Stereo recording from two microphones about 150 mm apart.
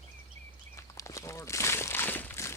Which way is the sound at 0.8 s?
20° left (ahead or behind).